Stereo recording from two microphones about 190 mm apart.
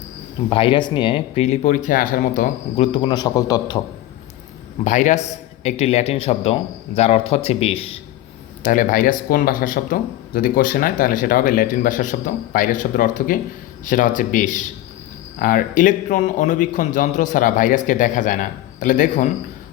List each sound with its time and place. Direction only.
0.5 s speech: 25° left (ahead or behind)
4.8 s speech: 40° left (ahead or behind)
8.6 s speech: 45° left (ahead or behind)